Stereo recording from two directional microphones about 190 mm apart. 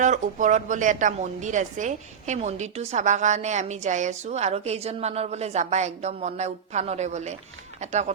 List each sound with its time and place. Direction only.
0.0 s a woman's voice: 40° right (ahead or behind)